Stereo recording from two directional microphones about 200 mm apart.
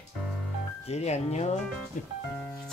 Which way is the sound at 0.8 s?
35° left (ahead or behind).